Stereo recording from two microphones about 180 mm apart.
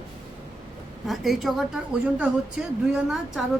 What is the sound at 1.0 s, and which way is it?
A woman's voice, centre (ahead or behind).